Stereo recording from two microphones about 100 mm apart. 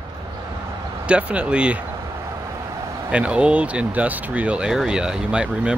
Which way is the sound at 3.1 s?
10° right (ahead or behind).